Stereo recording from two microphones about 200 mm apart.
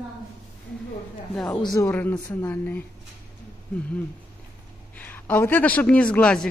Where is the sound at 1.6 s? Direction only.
15° left (ahead or behind).